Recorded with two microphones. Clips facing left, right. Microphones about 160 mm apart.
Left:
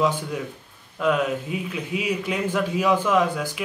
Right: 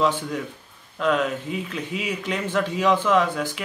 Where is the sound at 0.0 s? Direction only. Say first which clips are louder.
Even; 10° left (ahead or behind).